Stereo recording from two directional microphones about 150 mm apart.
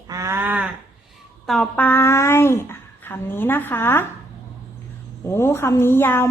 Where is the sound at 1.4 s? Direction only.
5° left (ahead or behind).